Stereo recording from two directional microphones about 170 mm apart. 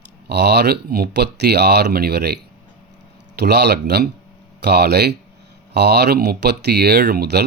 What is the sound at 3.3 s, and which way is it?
Speech, 80° right.